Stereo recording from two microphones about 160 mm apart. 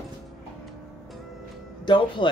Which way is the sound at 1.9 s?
30° left (ahead or behind).